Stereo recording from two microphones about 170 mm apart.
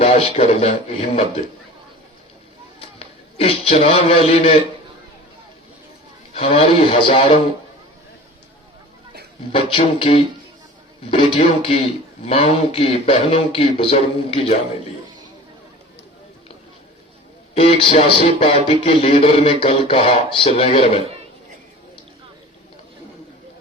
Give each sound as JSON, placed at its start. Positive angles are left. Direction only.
{"t": 0.0, "sound": "speech", "side_deg": 35}
{"t": 3.0, "sound": "a man's voice", "side_deg": 35}
{"t": 6.3, "sound": "speech", "side_deg": 35}
{"t": 9.5, "sound": "speech", "side_deg": 35}
{"t": 17.5, "sound": "speech", "side_deg": 35}